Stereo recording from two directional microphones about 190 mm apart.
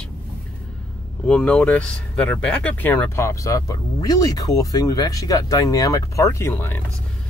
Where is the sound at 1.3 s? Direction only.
5° left (ahead or behind).